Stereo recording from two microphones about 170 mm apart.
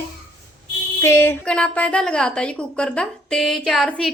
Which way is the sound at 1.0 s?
15° left (ahead or behind).